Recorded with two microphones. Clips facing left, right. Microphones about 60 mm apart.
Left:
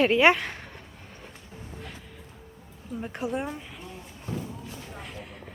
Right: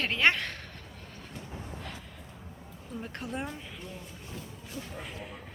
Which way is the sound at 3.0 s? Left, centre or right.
Centre.